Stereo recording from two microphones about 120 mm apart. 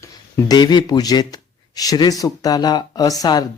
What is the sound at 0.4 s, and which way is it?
Speech, 35° left (ahead or behind).